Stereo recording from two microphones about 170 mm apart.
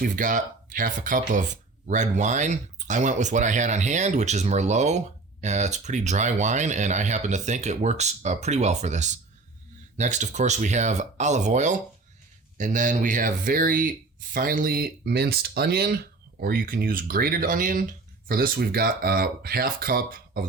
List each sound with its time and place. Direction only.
0.0 s speech: 50° right (ahead or behind)